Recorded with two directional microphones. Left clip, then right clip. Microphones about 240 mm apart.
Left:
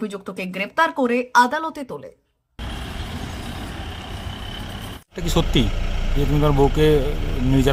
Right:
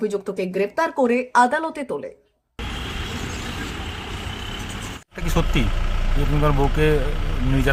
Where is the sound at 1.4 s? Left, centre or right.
Left.